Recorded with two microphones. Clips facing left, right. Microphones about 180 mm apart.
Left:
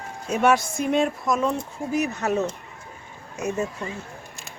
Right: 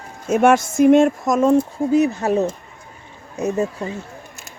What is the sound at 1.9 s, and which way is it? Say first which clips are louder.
Speech: right 6 dB; 30° right (ahead or behind).